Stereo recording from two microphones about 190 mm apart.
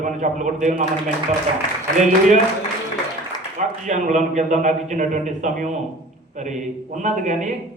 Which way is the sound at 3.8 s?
40° right (ahead or behind).